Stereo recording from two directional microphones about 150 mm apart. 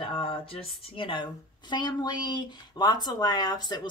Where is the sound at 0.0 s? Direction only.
35° left (ahead or behind).